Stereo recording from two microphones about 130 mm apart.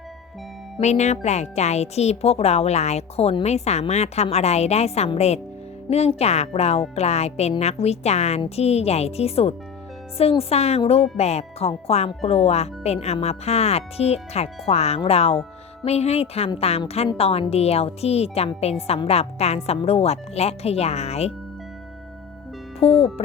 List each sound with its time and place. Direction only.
0.8 s a woman's voice: 60° left (ahead or behind)
23.0 s a woman's voice: 50° left (ahead or behind)